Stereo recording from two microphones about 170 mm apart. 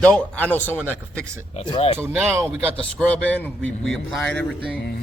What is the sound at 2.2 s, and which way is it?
Speech, 15° right (ahead or behind).